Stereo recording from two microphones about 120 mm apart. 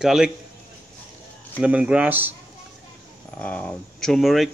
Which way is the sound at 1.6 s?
10° right (ahead or behind).